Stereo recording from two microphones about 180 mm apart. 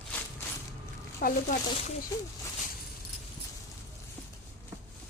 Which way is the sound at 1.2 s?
50° left (ahead or behind).